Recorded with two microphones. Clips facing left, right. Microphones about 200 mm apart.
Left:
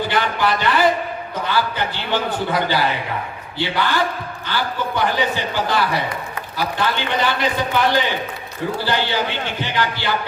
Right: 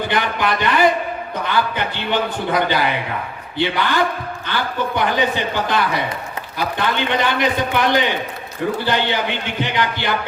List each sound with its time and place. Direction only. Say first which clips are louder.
0.1 s a man's voice: even; 20° right (ahead or behind)